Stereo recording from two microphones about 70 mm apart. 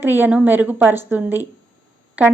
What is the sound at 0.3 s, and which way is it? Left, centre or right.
Speech, centre.